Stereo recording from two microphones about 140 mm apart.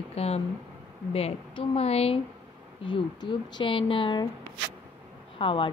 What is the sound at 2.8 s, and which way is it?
Speech, 35° left (ahead or behind).